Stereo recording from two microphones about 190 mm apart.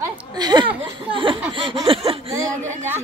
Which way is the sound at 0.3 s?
20° right (ahead or behind).